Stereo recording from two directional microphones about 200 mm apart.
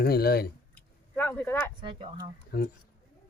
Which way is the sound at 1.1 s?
10° left (ahead or behind).